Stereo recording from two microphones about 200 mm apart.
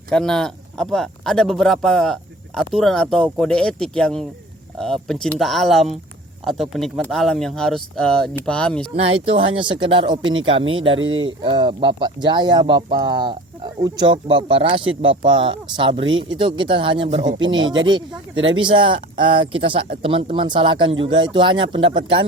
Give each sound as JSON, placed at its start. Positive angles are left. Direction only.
{"t": 0.1, "sound": "speech", "side_deg": 5}
{"t": 9.0, "sound": "speech", "side_deg": -25}
{"t": 10.9, "sound": "speech", "side_deg": -80}
{"t": 11.4, "sound": "speech", "side_deg": -25}
{"t": 18.3, "sound": "speech", "side_deg": -75}
{"t": 18.6, "sound": "speech", "side_deg": -25}